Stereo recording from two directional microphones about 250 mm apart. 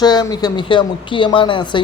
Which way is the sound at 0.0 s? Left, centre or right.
Centre.